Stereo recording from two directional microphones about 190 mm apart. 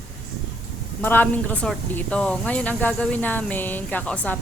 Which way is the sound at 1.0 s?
10° left (ahead or behind).